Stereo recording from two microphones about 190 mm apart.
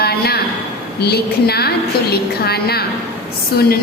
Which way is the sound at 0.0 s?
55° left (ahead or behind).